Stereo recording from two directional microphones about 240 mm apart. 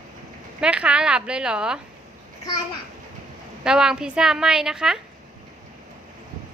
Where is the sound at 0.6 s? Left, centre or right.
Centre.